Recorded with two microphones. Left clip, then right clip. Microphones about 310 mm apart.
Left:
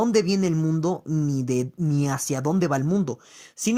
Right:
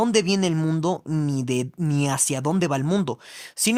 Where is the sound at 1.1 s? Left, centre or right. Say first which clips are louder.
Even; right.